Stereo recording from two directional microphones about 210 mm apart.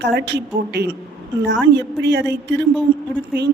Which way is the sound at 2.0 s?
55° right (ahead or behind).